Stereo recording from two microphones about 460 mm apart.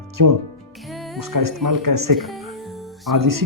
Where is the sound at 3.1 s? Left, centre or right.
Right.